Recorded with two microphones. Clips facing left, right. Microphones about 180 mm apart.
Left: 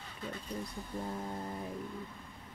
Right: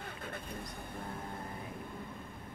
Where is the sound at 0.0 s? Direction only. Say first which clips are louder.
Even; 55° right (ahead or behind).